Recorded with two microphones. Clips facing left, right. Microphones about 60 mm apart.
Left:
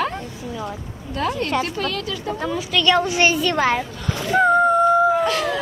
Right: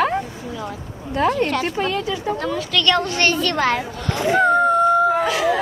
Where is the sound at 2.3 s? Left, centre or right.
Centre.